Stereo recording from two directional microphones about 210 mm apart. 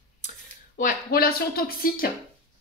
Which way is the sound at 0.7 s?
45° left (ahead or behind).